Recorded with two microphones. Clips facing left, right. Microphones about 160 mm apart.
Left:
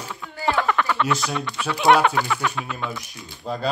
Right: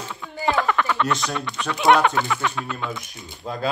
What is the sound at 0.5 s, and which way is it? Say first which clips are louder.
Speech: even; centre (ahead or behind).